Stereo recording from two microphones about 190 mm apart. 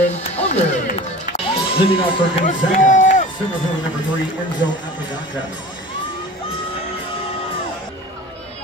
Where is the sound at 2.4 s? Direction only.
40° left (ahead or behind).